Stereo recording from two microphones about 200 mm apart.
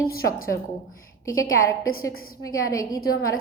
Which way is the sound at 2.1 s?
90° left.